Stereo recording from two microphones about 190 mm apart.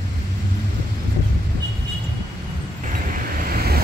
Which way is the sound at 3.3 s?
50° right (ahead or behind).